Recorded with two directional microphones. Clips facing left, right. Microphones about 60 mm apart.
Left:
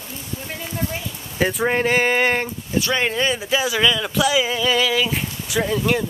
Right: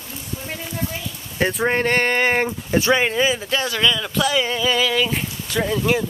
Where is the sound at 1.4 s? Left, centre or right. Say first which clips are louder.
Even; centre.